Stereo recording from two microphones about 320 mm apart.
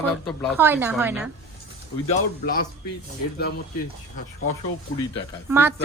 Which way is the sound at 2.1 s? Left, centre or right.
Left.